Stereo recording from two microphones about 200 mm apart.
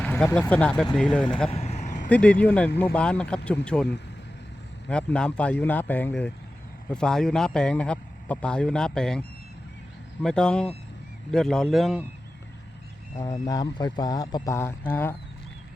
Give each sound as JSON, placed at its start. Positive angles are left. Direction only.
{"t": 0.0, "sound": "a man's voice", "side_deg": 5}
{"t": 1.5, "sound": "vehicle", "side_deg": 30}
{"t": 2.0, "sound": "a man's voice", "side_deg": 5}
{"t": 2.6, "sound": "speech", "side_deg": 55}
{"t": 2.9, "sound": "a man's voice", "side_deg": 5}
{"t": 4.9, "sound": "a man's voice", "side_deg": 5}
{"t": 10.2, "sound": "a man's voice", "side_deg": 5}
{"t": 13.2, "sound": "speech", "side_deg": 20}